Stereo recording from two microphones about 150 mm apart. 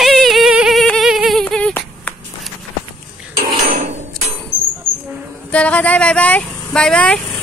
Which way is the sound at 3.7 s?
55° right (ahead or behind).